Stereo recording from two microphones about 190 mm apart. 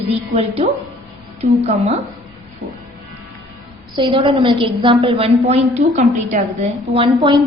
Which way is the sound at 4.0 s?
30° right (ahead or behind).